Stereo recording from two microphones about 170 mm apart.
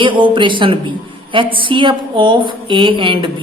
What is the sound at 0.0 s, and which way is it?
A woman's voice, 30° right (ahead or behind).